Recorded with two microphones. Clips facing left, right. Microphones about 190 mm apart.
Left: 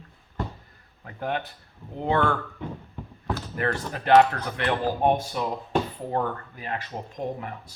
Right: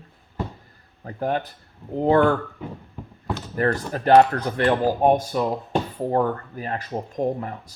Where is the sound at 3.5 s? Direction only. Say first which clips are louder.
Right 7 dB; 40° right (ahead or behind).